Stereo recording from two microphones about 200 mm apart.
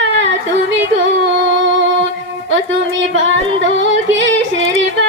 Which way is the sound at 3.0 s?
70° right (ahead or behind).